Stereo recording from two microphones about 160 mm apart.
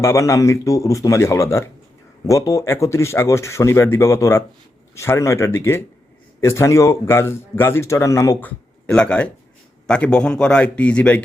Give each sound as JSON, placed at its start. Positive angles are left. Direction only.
{"t": 0.0, "sound": "speech", "side_deg": 15}